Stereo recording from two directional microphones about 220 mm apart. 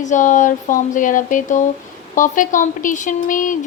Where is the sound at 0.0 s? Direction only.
35° left (ahead or behind).